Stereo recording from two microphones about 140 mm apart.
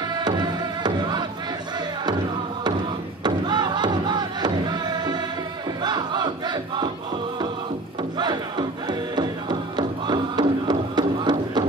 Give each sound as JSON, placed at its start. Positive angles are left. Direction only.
{"t": 0.2, "sound": "music", "side_deg": -30}
{"t": 3.3, "sound": "music", "side_deg": -30}
{"t": 5.8, "sound": "crowd", "side_deg": -30}
{"t": 8.2, "sound": "music", "side_deg": -30}